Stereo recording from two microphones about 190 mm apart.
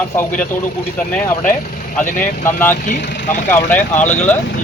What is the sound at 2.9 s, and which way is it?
Speech, 65° left (ahead or behind).